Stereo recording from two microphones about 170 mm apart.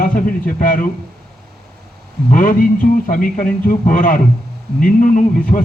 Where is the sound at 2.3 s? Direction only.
50° left (ahead or behind).